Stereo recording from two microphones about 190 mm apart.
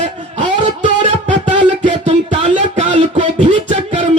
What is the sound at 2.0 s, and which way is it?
Music, 35° right (ahead or behind).